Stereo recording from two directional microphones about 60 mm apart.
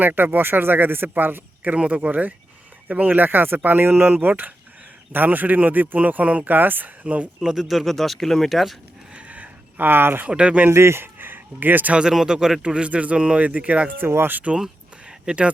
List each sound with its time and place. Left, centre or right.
0.0 s speech: right
7.3 s speech: centre
9.1 s a sound: right
10.2 s speech: right
10.7 s speech: right
11.9 s speech: centre; by 14.5 s right
15.3 s speech: centre